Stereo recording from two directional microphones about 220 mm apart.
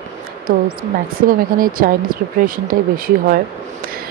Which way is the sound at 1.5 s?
40° right (ahead or behind).